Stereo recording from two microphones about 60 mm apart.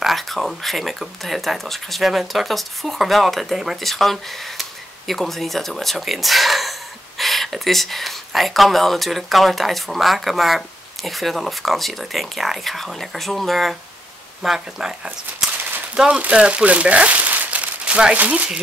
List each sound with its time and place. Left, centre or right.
0.0 s speech: centre
14.4 s speech: centre
15.4 s a sound: centre
16.1 s speech: right